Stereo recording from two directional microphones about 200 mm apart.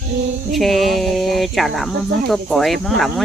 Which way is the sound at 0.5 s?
Centre (ahead or behind).